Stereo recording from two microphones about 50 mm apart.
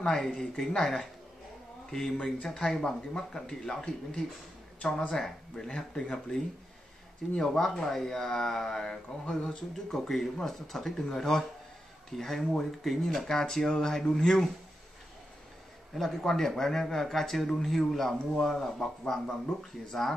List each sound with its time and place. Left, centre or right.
0.0 s speech: centre
0.6 s a man's voice: centre
15.9 s a man's voice: centre